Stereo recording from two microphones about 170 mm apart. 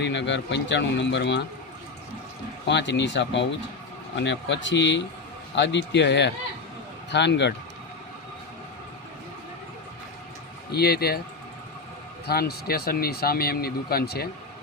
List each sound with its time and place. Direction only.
0.0 s speech: 90° left
2.6 s speech: 90° left
10.7 s speech: 70° left (ahead or behind)
12.2 s a man's voice: 65° left (ahead or behind)